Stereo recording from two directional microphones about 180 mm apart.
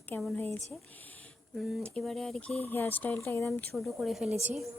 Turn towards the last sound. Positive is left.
turn(degrees=-10)  # may be behind; listen again after turning